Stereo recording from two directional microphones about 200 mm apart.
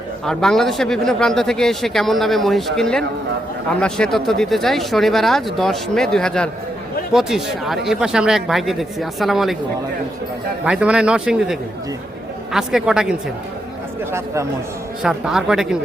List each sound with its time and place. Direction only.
0.3 s speech: centre (ahead or behind)
10.7 s speech: 5° right (ahead or behind)
12.5 s speech: centre (ahead or behind)
15.0 s speech: centre (ahead or behind)